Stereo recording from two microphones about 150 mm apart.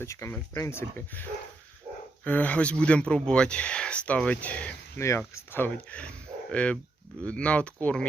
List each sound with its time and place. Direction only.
0.0 s speech: 20° left (ahead or behind)